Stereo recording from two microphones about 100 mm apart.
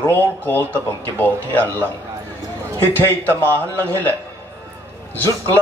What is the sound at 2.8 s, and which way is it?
A man's voice, 20° left (ahead or behind).